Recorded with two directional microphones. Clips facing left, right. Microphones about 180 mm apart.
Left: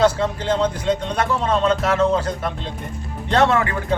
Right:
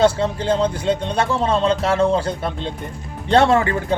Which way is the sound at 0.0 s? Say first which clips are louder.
Right 1 dB; 30° right (ahead or behind).